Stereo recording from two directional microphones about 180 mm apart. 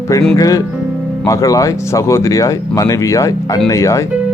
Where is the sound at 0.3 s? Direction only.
20° left (ahead or behind).